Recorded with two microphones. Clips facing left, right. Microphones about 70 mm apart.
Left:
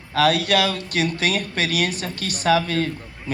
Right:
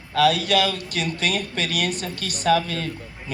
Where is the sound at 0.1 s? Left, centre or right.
Left.